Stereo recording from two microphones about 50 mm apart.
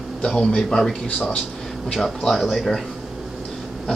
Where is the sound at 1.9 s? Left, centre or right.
Centre.